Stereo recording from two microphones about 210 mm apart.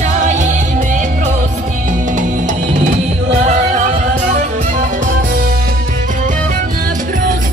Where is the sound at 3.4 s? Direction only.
35° right (ahead or behind).